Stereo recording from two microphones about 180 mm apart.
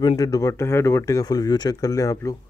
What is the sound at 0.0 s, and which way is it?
Speech, 20° left (ahead or behind).